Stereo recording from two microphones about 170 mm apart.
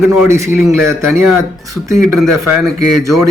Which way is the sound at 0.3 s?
15° right (ahead or behind).